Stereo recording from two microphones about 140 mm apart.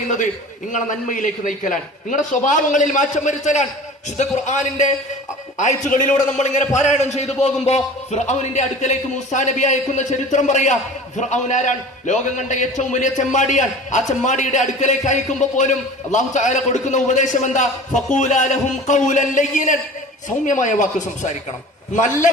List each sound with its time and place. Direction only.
0.7 s a man's voice: 65° left (ahead or behind)
21.9 s a man's voice: 65° left (ahead or behind)